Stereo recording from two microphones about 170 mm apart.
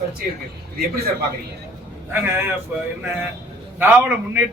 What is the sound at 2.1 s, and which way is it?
A man's voice, 10° right (ahead or behind).